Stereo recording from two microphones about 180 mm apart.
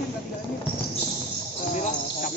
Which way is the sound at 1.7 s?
45° left (ahead or behind).